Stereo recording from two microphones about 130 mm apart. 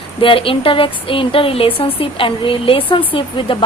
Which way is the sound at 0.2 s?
45° left (ahead or behind).